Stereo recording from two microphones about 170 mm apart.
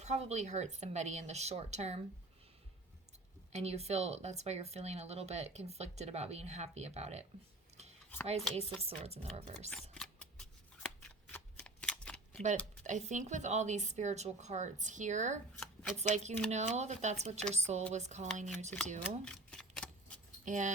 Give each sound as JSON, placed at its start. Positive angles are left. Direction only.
{"t": 0.0, "sound": "speech", "side_deg": -40}
{"t": 3.5, "sound": "speech", "side_deg": -40}
{"t": 8.3, "sound": "speech", "side_deg": -40}
{"t": 9.9, "sound": "scissors", "side_deg": 5}
{"t": 11.3, "sound": "shuffling cards", "side_deg": 10}
{"t": 12.8, "sound": "speech", "side_deg": -45}
{"t": 15.5, "sound": "shuffling cards", "side_deg": 5}
{"t": 16.0, "sound": "speech", "side_deg": -40}
{"t": 19.2, "sound": "a sound", "side_deg": 5}
{"t": 20.4, "sound": "speech", "side_deg": -45}